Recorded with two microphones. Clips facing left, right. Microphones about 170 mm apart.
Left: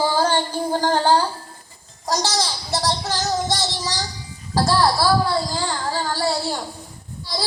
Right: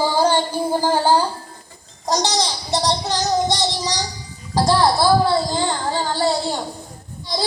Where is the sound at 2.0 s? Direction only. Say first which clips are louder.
Right 2 dB; 20° right (ahead or behind).